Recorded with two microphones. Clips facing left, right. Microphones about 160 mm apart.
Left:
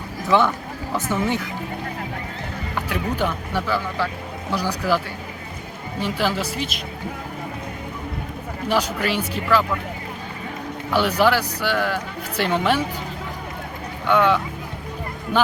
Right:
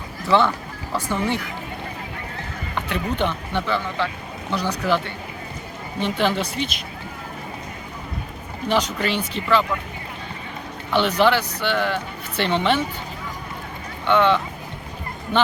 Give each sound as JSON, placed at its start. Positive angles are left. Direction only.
{"t": 0.3, "sound": "a woman's voice", "side_deg": 5}
{"t": 2.7, "sound": "a woman's voice", "side_deg": 10}
{"t": 8.7, "sound": "speech", "side_deg": 5}
{"t": 10.9, "sound": "speech", "side_deg": 5}
{"t": 14.1, "sound": "speech", "side_deg": 10}